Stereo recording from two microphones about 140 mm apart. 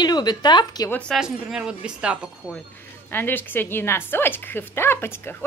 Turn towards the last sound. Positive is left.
turn(degrees=15)  # may be behind; listen again after turning